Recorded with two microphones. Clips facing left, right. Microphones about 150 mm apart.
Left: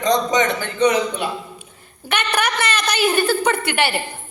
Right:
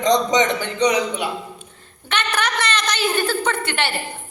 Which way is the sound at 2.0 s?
10° left (ahead or behind).